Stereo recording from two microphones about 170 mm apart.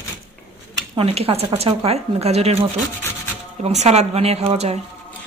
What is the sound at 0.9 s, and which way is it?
A woman's voice, 35° right (ahead or behind).